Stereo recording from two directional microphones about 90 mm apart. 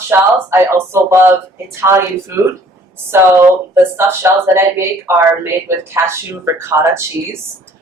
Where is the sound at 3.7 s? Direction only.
30° right (ahead or behind).